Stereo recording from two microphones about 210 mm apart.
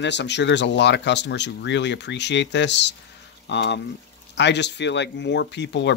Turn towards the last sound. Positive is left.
turn(degrees=55)  # may be behind; listen again after turning